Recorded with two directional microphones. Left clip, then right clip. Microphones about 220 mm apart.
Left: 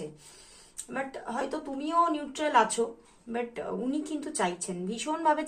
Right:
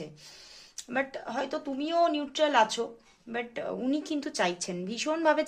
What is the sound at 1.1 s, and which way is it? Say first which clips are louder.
Speech: even; 45° right (ahead or behind).